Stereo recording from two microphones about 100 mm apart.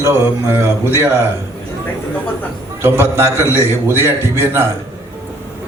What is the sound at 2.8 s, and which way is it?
A man's voice, 25° right (ahead or behind).